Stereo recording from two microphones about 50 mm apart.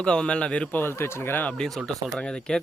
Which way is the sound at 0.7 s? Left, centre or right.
Left.